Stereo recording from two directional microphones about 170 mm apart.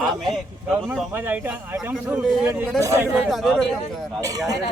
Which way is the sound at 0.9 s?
10° right (ahead or behind).